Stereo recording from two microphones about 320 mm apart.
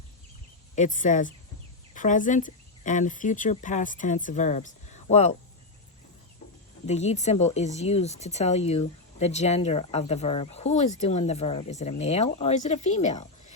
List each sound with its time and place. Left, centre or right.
0.8 s speech: left
6.8 s speech: left